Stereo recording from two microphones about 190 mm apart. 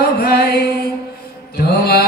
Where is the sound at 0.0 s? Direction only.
60° left (ahead or behind).